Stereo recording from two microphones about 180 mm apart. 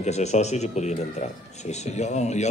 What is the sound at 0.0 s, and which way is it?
Speech, 40° left (ahead or behind).